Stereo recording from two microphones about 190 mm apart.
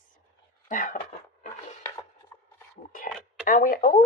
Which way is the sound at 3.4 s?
50° left (ahead or behind).